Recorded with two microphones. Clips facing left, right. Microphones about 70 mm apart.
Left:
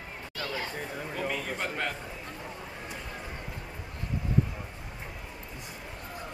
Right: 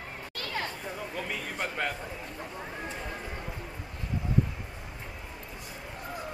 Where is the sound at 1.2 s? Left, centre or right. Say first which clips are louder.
Left 3 dB; centre.